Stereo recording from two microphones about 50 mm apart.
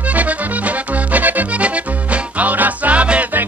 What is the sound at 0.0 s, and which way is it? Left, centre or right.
Music, right.